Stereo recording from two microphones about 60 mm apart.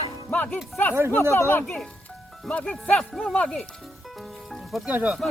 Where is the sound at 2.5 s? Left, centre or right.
Left.